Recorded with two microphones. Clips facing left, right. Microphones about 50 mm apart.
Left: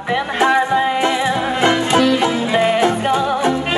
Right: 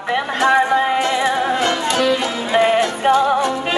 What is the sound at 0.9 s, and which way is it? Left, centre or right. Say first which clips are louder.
Music: even; centre.